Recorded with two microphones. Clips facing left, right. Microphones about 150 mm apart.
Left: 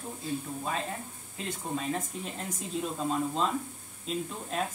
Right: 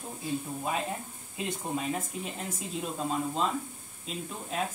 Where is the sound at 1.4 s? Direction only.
15° right (ahead or behind).